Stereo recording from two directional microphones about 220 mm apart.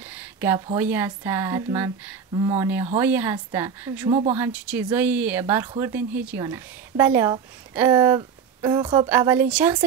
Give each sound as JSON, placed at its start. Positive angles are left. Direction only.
{"t": 0.1, "sound": "a sound", "side_deg": -10}
{"t": 0.7, "sound": "a woman's voice", "side_deg": -10}
{"t": 4.1, "sound": "speech", "side_deg": -25}
{"t": 4.4, "sound": "a woman's voice", "side_deg": -5}
{"t": 9.1, "sound": "a woman's voice", "side_deg": -10}